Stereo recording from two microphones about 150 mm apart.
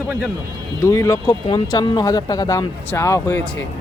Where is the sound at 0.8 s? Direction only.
20° left (ahead or behind).